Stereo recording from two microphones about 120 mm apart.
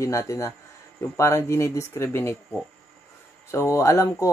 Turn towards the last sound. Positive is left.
turn(degrees=25)  # may be behind; listen again after turning